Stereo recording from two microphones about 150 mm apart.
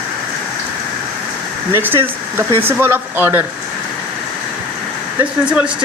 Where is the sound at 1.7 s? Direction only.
15° right (ahead or behind).